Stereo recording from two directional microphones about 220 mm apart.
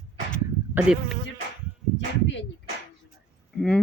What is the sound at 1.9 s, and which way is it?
Bird, 55° left (ahead or behind).